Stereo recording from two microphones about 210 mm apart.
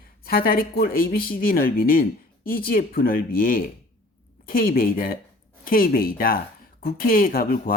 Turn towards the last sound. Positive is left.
turn(degrees=45)  # may be behind; listen again after turning